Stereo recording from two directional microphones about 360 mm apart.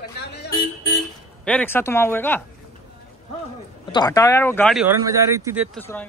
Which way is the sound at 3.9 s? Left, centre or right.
Centre.